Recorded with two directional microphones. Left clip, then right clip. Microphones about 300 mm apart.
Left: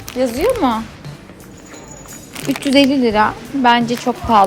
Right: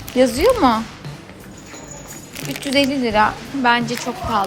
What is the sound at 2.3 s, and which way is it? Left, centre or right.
A child's voice, centre.